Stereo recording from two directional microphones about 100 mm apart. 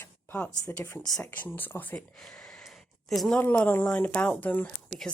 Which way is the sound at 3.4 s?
15° left (ahead or behind).